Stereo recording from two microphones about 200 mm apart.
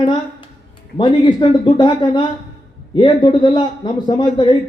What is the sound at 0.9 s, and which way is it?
A man's voice, 25° left (ahead or behind).